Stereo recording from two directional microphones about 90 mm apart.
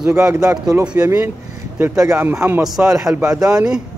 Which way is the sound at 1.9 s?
35° right (ahead or behind).